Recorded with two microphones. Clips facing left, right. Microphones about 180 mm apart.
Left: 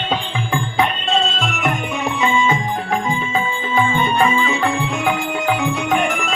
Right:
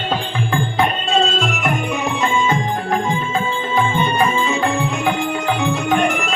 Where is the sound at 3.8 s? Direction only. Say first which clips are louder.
Left 1 dB; centre (ahead or behind).